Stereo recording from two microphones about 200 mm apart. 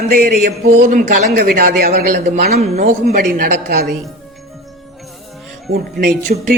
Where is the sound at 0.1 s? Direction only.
45° right (ahead or behind).